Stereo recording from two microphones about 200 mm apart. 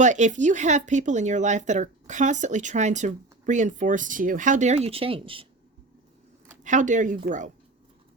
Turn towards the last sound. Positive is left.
turn(degrees=-40)  # may be behind; listen again after turning